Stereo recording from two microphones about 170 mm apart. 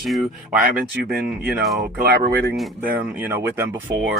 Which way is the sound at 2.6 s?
5° right (ahead or behind).